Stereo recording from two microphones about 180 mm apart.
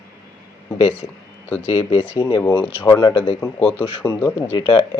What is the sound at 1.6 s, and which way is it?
Speech, 30° left (ahead or behind).